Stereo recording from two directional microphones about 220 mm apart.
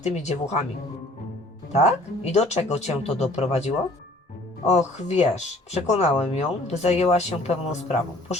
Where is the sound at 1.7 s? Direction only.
30° left (ahead or behind).